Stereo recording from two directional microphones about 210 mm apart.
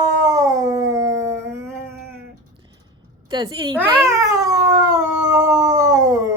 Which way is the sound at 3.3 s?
20° right (ahead or behind).